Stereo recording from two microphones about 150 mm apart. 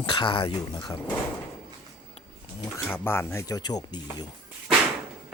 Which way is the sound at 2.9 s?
15° left (ahead or behind).